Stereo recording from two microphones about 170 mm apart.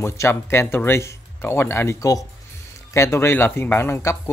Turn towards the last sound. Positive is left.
turn(degrees=15)  # may be behind; listen again after turning